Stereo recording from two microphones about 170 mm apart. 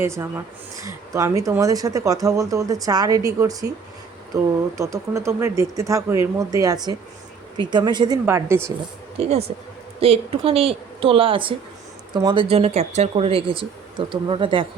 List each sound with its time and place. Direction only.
0.0 s speech: 15° right (ahead or behind)
9.1 s a woman's voice: 35° right (ahead or behind)